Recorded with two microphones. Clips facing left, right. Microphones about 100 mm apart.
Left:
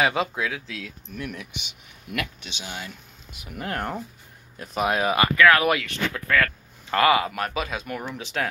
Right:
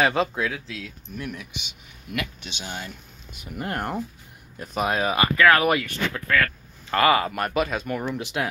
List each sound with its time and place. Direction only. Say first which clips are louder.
0.0 s speech: right 1 dB; 5° left (ahead or behind)
2.6 s speech: right 1 dB; 5° left (ahead or behind)
4.6 s speech: left 1 dB; 5° left (ahead or behind)
5.1 s speech: even; 30° right (ahead or behind)
5.6 s speech: right 1 dB; centre (ahead or behind)